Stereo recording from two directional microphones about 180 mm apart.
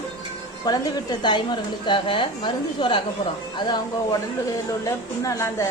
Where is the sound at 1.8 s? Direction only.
30° left (ahead or behind).